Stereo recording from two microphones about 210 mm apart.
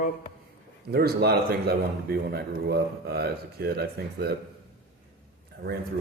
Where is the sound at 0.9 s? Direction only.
50° right (ahead or behind).